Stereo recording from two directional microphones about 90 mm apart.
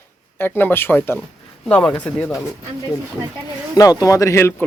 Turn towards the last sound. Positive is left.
turn(degrees=30)  # may be behind; listen again after turning